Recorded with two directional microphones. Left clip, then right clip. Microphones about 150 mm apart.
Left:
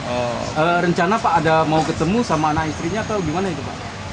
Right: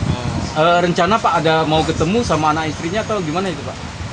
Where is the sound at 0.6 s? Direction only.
90° right.